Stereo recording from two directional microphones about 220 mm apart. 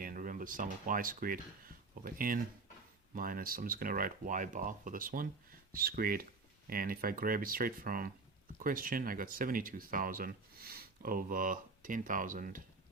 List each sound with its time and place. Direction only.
0.0 s speech: 40° right (ahead or behind)